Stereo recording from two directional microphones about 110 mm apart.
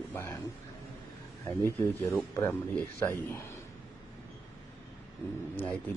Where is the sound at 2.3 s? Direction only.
15° left (ahead or behind).